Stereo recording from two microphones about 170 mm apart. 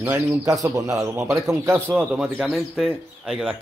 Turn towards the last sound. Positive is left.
turn(degrees=0)  # may be behind; listen again after turning